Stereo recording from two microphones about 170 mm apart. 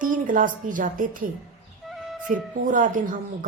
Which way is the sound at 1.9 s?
Centre (ahead or behind).